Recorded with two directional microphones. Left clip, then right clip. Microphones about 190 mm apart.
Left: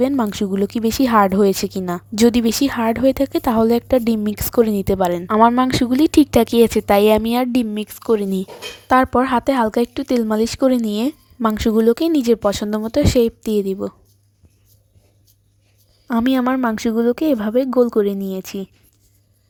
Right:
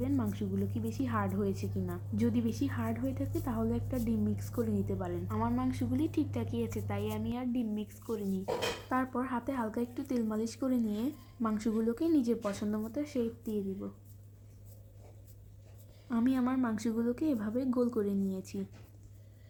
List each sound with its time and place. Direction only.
0.2 s a woman's voice: 60° left (ahead or behind)
16.0 s a woman's voice: 50° left (ahead or behind)